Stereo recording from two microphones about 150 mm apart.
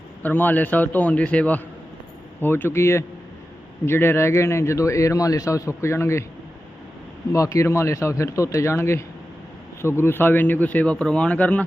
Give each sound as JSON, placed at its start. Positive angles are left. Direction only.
{"t": 0.2, "sound": "a man's voice", "side_deg": 10}
{"t": 7.3, "sound": "a man's voice", "side_deg": 20}